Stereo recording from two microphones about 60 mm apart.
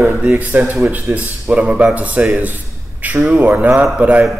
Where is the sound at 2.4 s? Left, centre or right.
Right.